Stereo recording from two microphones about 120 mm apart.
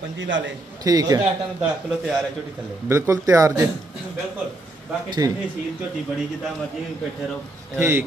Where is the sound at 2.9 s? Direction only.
25° right (ahead or behind).